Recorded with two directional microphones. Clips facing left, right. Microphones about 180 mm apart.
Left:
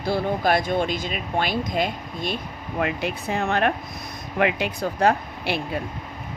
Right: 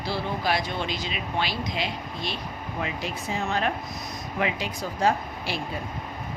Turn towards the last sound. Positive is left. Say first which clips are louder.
# left 4 dB
turn(degrees=60)  # may be behind; listen again after turning